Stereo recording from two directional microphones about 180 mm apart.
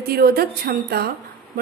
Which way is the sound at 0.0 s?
60° right (ahead or behind).